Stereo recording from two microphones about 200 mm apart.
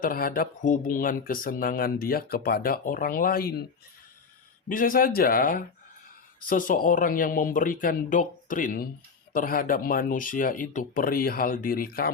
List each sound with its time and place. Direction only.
0.0 s speech: 45° left (ahead or behind)
4.7 s speech: 45° left (ahead or behind)